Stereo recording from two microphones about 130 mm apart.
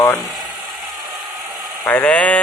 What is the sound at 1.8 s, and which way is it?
Speech, 10° left (ahead or behind).